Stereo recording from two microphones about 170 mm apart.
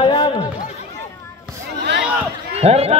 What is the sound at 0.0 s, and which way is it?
Chatter, 25° left (ahead or behind).